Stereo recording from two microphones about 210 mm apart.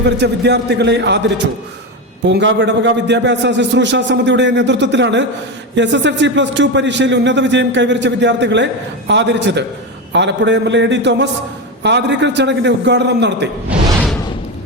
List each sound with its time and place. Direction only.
0.0 s a man's voice: 55° right (ahead or behind)
2.2 s speech: 55° right (ahead or behind)